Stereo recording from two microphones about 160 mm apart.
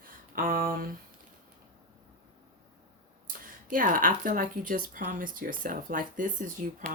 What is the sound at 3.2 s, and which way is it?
Speech, 60° right (ahead or behind).